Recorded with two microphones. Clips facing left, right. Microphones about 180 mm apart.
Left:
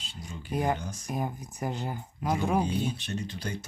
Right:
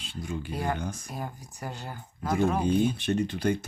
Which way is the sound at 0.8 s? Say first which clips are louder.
Right 5 dB; 55° right (ahead or behind).